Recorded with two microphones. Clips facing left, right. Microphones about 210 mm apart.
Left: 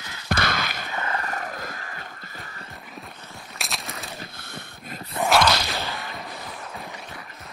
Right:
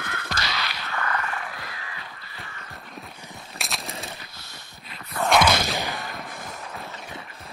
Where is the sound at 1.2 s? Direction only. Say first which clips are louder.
Left 2 dB; 40° left (ahead or behind).